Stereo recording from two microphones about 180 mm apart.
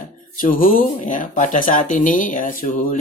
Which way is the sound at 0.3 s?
50° left (ahead or behind).